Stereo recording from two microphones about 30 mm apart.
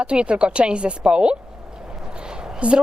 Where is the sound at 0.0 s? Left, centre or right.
Right.